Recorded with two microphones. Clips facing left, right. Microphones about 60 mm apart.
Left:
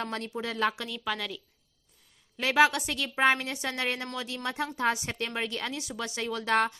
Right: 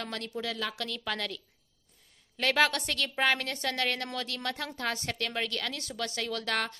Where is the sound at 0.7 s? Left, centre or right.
Centre.